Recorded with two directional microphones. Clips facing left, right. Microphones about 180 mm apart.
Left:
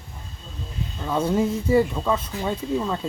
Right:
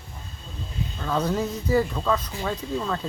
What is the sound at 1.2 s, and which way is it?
Speech, 25° left (ahead or behind).